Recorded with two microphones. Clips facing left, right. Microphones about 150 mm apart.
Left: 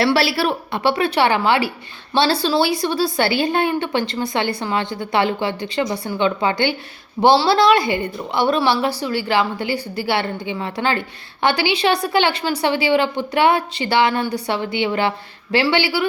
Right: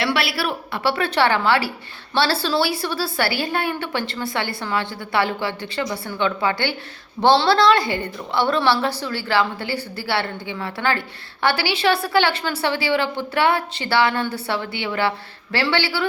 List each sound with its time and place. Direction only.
0.0 s a woman's voice: 35° left (ahead or behind); by 16.0 s 15° left (ahead or behind)